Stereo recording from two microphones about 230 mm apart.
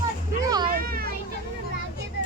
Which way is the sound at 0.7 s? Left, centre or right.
Right.